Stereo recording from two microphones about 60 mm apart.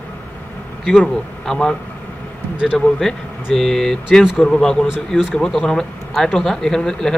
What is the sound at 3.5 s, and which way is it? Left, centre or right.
Speech, centre.